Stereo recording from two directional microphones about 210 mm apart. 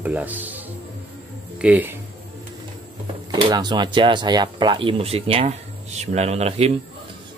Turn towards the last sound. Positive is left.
turn(degrees=-30)  # may be behind; listen again after turning